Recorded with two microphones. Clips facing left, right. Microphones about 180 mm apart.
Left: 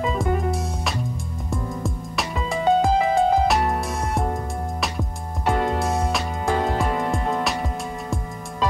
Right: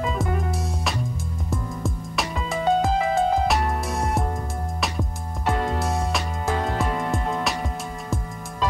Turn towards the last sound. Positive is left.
turn(degrees=0)  # may be behind; listen again after turning